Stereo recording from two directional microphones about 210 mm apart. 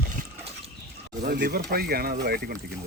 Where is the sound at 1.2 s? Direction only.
45° right (ahead or behind).